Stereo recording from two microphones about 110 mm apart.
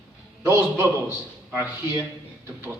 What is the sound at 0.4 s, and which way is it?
Speech, 25° right (ahead or behind).